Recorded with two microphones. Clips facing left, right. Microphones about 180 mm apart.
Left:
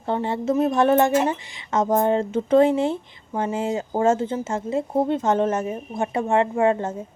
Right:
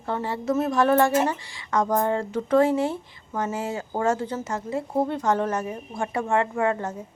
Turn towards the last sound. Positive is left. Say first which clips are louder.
# left 4 dB
turn(degrees=25)  # may be behind; listen again after turning